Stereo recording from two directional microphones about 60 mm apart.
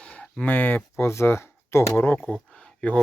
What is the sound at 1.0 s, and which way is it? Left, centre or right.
Speech, left.